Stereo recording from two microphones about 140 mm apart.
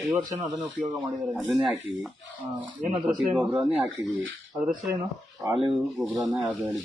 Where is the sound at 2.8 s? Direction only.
70° right (ahead or behind).